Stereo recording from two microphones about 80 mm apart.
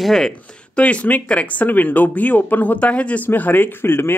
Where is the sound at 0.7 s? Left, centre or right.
Centre.